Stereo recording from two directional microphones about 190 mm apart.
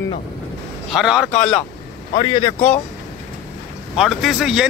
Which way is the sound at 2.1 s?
25° left (ahead or behind).